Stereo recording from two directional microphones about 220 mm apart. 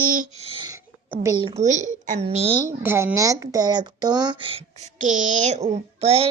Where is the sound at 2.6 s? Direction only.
10° right (ahead or behind).